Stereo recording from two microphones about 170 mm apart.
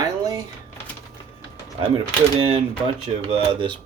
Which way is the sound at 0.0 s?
20° right (ahead or behind).